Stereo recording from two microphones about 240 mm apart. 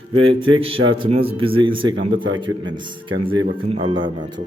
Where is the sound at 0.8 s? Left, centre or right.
Right.